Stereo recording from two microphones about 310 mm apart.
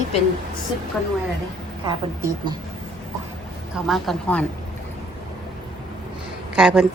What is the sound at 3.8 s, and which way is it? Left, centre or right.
Speech, centre.